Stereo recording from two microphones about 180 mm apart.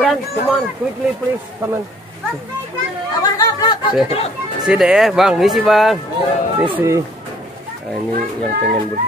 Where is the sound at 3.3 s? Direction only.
25° left (ahead or behind).